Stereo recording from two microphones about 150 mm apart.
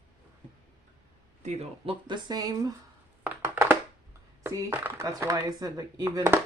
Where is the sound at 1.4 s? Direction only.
40° right (ahead or behind); by 2.7 s 25° right (ahead or behind).